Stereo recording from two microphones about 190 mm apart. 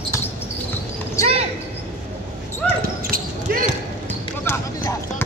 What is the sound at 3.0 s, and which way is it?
Basketball bounce, 50° right (ahead or behind).